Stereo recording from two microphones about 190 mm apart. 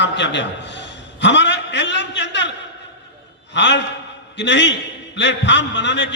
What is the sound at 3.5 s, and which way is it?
A man's voice, 70° left (ahead or behind).